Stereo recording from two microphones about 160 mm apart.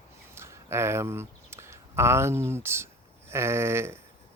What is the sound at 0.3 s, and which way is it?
Speech, 15° right (ahead or behind).